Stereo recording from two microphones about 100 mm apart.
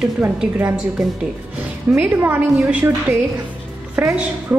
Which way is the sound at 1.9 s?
10° right (ahead or behind).